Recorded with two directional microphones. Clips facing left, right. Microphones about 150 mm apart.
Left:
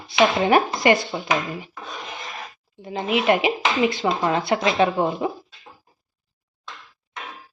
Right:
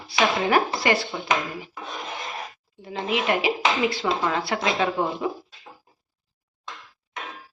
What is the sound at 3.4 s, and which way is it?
Speech, 20° left (ahead or behind).